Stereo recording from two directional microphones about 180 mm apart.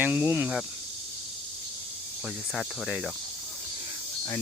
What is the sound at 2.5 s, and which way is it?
Cricket, centre (ahead or behind).